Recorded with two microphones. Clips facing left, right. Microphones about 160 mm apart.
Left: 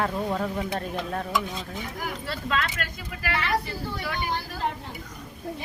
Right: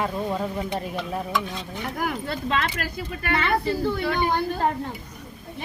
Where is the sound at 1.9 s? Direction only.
55° right (ahead or behind).